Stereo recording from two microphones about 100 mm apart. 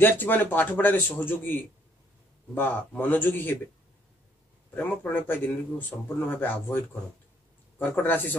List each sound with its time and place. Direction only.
0.0 s speech: 20° left (ahead or behind)
4.7 s speech: 20° left (ahead or behind)